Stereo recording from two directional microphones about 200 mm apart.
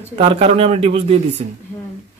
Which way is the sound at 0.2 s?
30° right (ahead or behind).